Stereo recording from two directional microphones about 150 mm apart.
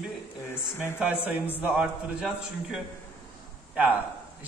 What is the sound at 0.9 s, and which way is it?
A man's voice, 5° right (ahead or behind).